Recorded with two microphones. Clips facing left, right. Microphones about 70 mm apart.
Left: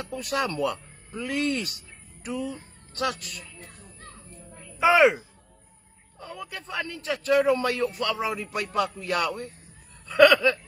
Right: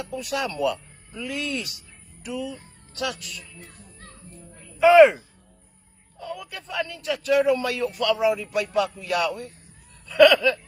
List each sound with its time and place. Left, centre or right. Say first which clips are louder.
0.1 s speech: left 1 dB; left
4.3 s child singing: even; centre
4.9 s speech: right 6 dB; centre
6.1 s a man's voice: right 3 dB; left
10.0 s a sound: right 2 dB; left